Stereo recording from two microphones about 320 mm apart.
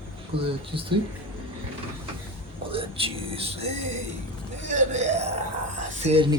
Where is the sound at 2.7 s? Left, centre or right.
Centre.